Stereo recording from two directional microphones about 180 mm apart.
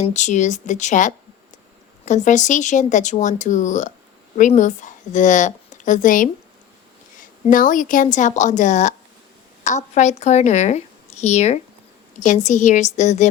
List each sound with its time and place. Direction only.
0.0 s a woman's voice: 40° left (ahead or behind)
7.4 s a woman's voice: 50° left (ahead or behind)